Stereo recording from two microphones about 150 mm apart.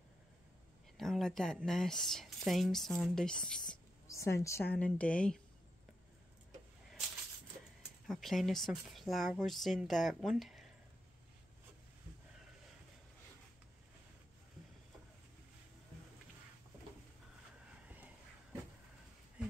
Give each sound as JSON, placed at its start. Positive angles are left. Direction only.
{"t": 0.9, "sound": "speech", "side_deg": 0}
{"t": 4.1, "sound": "a woman's voice", "side_deg": 20}
{"t": 8.1, "sound": "speech", "side_deg": 0}